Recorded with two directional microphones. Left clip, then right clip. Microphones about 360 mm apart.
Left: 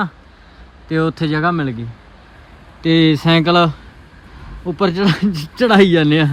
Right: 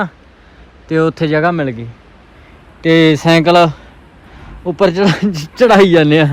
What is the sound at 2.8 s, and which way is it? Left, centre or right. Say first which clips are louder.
Speech: right 4 dB; centre.